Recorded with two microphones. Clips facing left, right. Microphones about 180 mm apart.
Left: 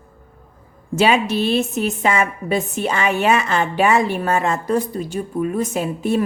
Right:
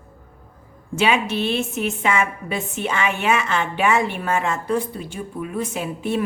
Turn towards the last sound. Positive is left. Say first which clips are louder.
# left 4 dB
turn(degrees=40)  # may be behind; listen again after turning